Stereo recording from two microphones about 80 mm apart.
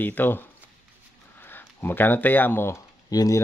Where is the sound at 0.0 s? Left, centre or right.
Left.